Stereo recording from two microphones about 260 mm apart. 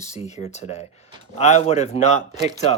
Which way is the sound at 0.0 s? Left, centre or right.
Left.